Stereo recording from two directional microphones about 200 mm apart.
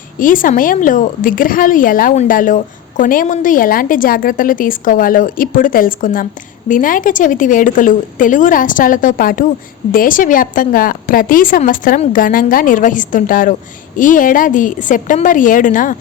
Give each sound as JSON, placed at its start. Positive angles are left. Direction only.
{"t": 0.2, "sound": "a woman's voice", "side_deg": 40}